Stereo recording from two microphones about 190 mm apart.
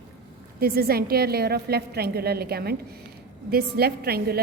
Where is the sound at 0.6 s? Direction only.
55° right (ahead or behind).